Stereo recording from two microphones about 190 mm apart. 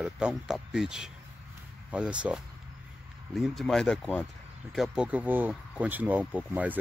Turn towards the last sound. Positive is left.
turn(degrees=-10)  # may be behind; listen again after turning